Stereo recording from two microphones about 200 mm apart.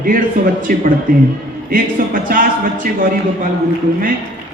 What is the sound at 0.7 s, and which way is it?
A man's voice, 45° right (ahead or behind).